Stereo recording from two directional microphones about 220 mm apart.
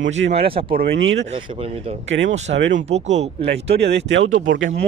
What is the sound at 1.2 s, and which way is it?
Speech, 25° right (ahead or behind).